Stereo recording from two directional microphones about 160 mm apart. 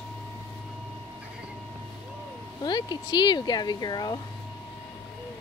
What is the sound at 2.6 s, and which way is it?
Speech, 25° left (ahead or behind).